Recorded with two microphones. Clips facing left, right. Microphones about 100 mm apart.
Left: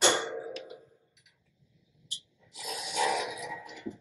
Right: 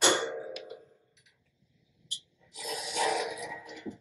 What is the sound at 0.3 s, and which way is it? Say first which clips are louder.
Clang: even; 10° right (ahead or behind).